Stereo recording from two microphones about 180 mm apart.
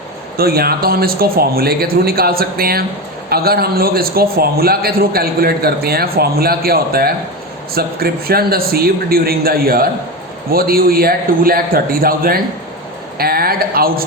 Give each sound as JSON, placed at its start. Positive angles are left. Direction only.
{"t": 0.3, "sound": "a man's voice", "side_deg": -60}